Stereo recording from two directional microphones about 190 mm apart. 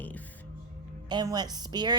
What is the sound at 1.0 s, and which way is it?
Speech, 20° right (ahead or behind).